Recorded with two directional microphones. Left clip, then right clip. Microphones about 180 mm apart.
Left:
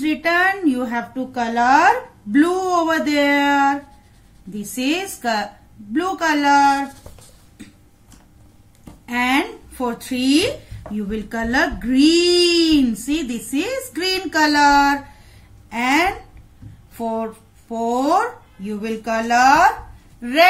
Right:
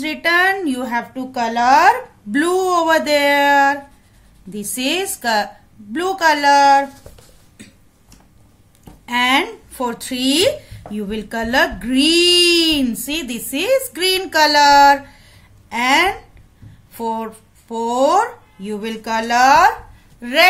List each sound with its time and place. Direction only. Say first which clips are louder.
0.0 s speech: right 2 dB; 65° right (ahead or behind)
9.0 s a woman's voice: right 3 dB; 70° right (ahead or behind)